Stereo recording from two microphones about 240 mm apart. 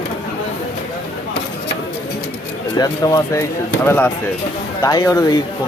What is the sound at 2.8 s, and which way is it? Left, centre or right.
Speech, centre.